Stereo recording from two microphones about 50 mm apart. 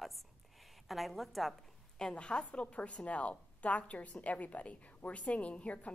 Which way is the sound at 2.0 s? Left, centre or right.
Centre.